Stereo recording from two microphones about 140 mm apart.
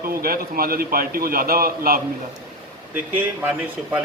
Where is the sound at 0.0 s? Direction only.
90° right.